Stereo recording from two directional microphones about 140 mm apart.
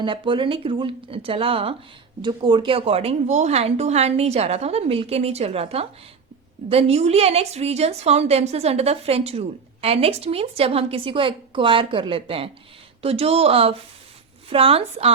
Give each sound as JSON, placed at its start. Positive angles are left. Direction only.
{"t": 0.0, "sound": "a woman's voice", "side_deg": -35}